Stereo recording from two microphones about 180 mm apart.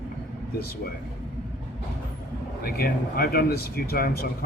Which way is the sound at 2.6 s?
55° left (ahead or behind).